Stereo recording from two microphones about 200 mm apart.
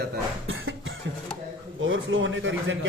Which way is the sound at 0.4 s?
75° right (ahead or behind).